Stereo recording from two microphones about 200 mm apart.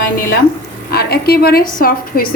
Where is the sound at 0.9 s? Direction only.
50° left (ahead or behind).